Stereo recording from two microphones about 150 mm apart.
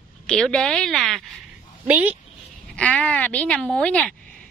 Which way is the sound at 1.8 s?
10° right (ahead or behind).